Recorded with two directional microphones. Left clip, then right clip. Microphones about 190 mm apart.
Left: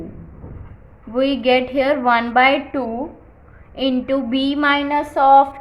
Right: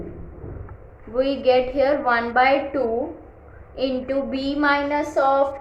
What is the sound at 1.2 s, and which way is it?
A woman's voice, 40° left (ahead or behind).